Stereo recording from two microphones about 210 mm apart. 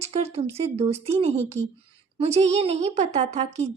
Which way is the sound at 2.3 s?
30° right (ahead or behind).